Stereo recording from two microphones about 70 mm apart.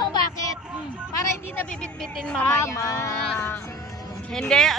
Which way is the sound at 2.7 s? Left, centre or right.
Left.